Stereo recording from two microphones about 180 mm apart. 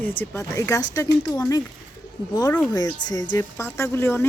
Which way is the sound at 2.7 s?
20° left (ahead or behind).